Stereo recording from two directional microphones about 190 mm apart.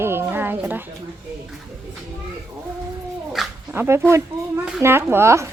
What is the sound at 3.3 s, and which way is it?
A woman's voice, 10° right (ahead or behind).